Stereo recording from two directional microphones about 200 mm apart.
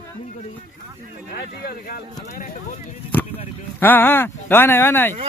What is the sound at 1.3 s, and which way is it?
Speech, 50° left (ahead or behind).